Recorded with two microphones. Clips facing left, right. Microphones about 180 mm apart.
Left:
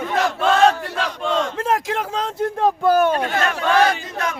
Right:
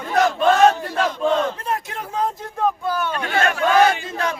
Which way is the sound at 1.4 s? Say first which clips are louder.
Left 2 dB; 90° left.